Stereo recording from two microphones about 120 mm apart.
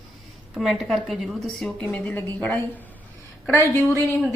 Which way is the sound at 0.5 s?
Centre (ahead or behind).